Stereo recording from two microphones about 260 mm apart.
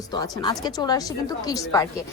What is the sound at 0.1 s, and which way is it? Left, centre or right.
Speech, centre.